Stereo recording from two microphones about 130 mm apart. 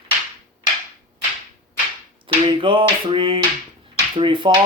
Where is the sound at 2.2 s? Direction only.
40° right (ahead or behind).